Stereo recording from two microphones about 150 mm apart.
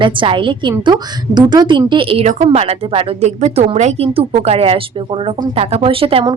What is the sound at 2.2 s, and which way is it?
A woman's voice, 50° right (ahead or behind).